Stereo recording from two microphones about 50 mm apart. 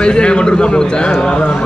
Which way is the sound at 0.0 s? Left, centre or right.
Centre.